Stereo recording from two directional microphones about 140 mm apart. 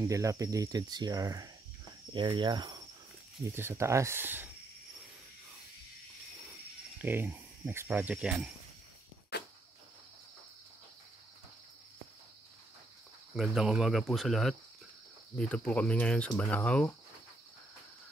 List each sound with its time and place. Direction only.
0.0 s speech: 25° right (ahead or behind)
3.4 s speech: 20° right (ahead or behind)
7.0 s speech: 15° right (ahead or behind)
13.3 s speech: 5° right (ahead or behind)